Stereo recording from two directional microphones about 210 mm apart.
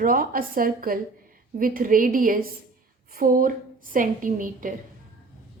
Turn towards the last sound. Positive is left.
turn(degrees=-40)  # may be behind; listen again after turning